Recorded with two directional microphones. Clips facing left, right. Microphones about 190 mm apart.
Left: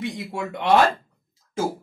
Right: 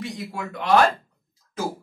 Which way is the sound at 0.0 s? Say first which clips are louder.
Left 3 dB; 25° left (ahead or behind).